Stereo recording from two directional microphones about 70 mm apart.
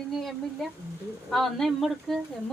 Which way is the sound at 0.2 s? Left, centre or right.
Centre.